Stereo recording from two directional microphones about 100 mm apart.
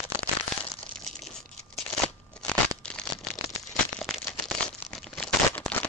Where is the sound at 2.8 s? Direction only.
10° left (ahead or behind).